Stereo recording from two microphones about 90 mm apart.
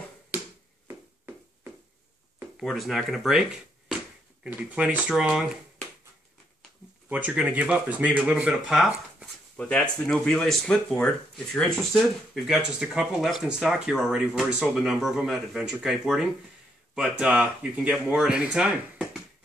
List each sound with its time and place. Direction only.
0.8 s a sound: 25° right (ahead or behind)
2.6 s speech: centre (ahead or behind)
4.5 s speech: 15° right (ahead or behind)
7.1 s speech: 10° right (ahead or behind)
9.6 s speech: 10° left (ahead or behind)
12.4 s speech: 5° right (ahead or behind)